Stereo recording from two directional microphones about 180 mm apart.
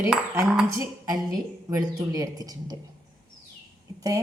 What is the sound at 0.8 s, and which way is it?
Speech, 20° right (ahead or behind).